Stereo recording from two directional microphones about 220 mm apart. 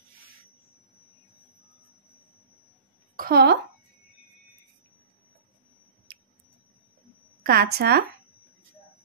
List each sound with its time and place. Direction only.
3.2 s speech: 45° right (ahead or behind)
7.4 s speech: 45° right (ahead or behind)